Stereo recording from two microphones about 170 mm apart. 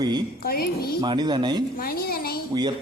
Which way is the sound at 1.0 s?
25° right (ahead or behind).